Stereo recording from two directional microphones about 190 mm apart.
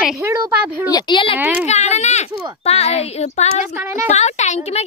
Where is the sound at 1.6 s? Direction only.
35° left (ahead or behind).